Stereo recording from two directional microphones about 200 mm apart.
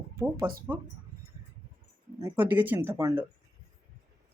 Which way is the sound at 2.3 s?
10° right (ahead or behind).